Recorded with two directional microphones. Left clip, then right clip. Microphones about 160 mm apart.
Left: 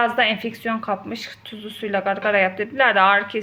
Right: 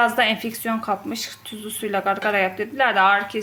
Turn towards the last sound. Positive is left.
turn(degrees=-10)  # may be behind; listen again after turning